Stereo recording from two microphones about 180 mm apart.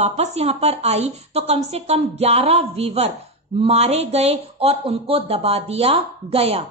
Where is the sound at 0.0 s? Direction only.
35° right (ahead or behind).